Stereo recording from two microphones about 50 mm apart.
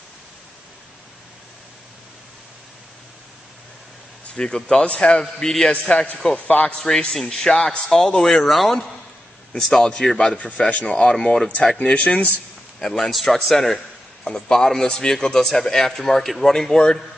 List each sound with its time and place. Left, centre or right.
4.4 s a man's voice: centre
5.2 s a man's voice: centre
5.7 s speech: centre
6.3 s speech: left
7.2 s a man's voice: centre
10.3 s speech: left
10.9 s speech: centre
12.7 s a man's voice: centre